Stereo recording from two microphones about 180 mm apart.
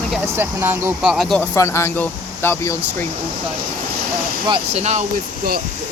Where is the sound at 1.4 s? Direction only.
15° left (ahead or behind).